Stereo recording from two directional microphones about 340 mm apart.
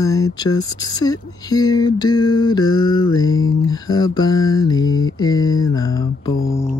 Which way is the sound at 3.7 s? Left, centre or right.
Centre.